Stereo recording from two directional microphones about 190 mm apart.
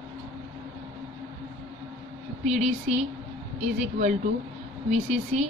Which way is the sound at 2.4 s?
35° right (ahead or behind).